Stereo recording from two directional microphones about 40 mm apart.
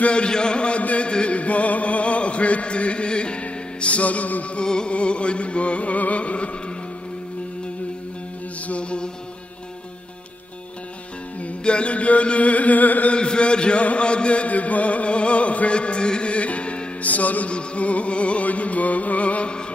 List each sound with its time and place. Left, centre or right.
0.0 s music: left
4.6 s music: left
8.6 s mantra: left
11.6 s music: left
13.1 s a man's voice: left
17.6 s music: left